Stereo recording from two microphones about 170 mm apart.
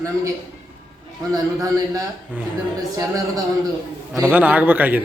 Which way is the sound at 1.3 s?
20° right (ahead or behind).